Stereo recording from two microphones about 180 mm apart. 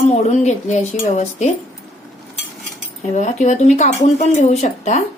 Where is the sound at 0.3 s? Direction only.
40° left (ahead or behind).